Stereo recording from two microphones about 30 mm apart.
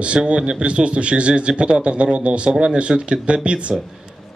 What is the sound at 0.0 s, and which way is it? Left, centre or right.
Speech, right.